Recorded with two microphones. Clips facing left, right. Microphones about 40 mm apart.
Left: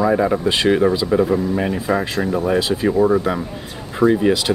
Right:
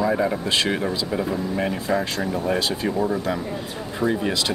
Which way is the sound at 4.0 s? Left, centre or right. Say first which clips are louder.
Left 8 dB; centre.